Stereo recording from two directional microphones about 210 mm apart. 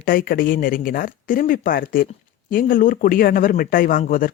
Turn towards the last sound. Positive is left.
turn(degrees=40)  # may be behind; listen again after turning